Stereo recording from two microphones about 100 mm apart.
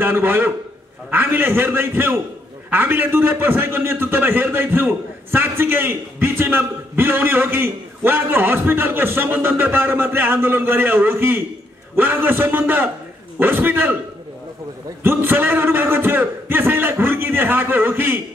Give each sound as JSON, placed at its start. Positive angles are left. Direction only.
{"t": 0.0, "sound": "a man's voice", "side_deg": -20}
{"t": 15.0, "sound": "a man's voice", "side_deg": -20}